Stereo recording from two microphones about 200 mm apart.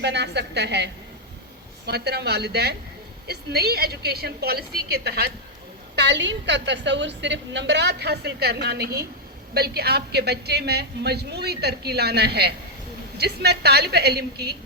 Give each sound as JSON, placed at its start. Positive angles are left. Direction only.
{"t": 0.0, "sound": "a woman's voice", "side_deg": -60}
{"t": 1.9, "sound": "a woman's voice", "side_deg": -55}